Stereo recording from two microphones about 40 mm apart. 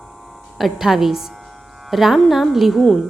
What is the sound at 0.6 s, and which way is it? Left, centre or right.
A woman's voice, centre.